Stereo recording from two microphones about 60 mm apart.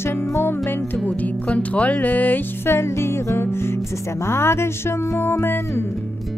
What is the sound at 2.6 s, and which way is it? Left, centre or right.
Speech, left.